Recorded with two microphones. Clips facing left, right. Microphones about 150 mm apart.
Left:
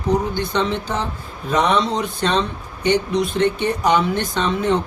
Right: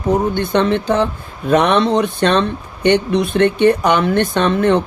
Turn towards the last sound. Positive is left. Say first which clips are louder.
# right 5 dB
turn(degrees=-65)  # may be behind; listen again after turning